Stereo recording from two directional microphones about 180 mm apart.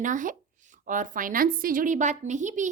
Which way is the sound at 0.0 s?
45° right (ahead or behind).